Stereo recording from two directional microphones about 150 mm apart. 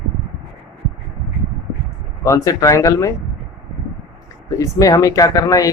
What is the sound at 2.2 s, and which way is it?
Speech, 20° left (ahead or behind).